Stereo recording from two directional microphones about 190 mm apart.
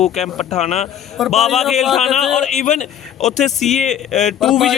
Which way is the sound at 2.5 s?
40° left (ahead or behind).